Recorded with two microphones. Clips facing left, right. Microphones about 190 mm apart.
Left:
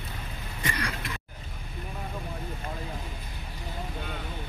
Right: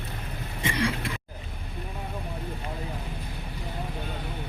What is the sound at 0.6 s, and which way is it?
Throat clearing, 25° right (ahead or behind).